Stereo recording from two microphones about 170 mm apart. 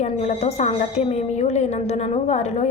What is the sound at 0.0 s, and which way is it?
A woman's voice, 40° left (ahead or behind).